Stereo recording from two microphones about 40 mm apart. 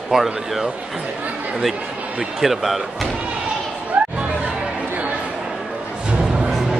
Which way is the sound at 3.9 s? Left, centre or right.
Right.